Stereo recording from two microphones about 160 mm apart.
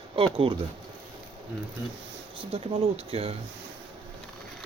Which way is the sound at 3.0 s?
40° right (ahead or behind).